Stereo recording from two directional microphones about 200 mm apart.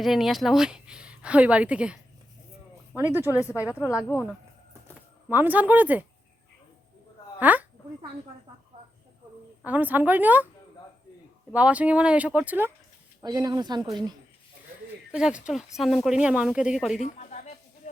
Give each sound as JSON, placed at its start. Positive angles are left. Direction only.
{"t": 0.0, "sound": "speech", "side_deg": 0}
{"t": 4.0, "sound": "speech", "side_deg": 10}
{"t": 5.3, "sound": "speech", "side_deg": -10}
{"t": 7.3, "sound": "a woman's voice", "side_deg": -10}
{"t": 9.6, "sound": "speech", "side_deg": -10}
{"t": 11.5, "sound": "speech", "side_deg": -5}
{"t": 15.1, "sound": "speech", "side_deg": -5}
{"t": 17.0, "sound": "a sound", "side_deg": 35}